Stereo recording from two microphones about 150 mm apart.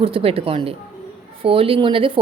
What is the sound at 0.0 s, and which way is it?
A woman's voice, 40° right (ahead or behind).